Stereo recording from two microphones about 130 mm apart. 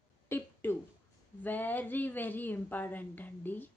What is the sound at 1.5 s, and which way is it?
Speech, 15° left (ahead or behind).